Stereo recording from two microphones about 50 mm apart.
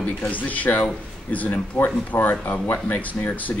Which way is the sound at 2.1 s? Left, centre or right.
Left.